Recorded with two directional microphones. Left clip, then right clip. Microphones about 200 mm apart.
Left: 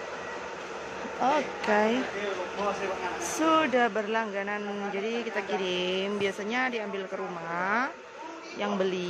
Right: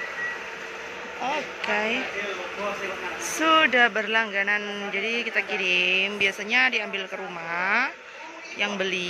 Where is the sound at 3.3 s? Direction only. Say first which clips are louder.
Right 5 dB; 10° left (ahead or behind).